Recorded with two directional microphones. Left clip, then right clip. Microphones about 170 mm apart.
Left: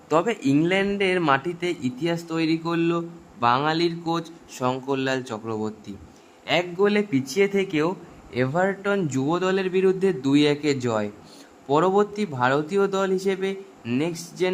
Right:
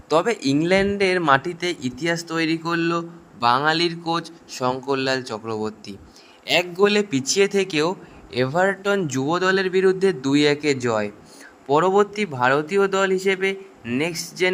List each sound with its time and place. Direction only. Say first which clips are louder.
0.1 s a man's voice: right 2 dB; 15° right (ahead or behind)